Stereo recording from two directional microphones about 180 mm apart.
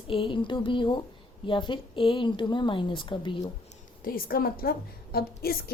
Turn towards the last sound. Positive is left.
turn(degrees=60)  # may be behind; listen again after turning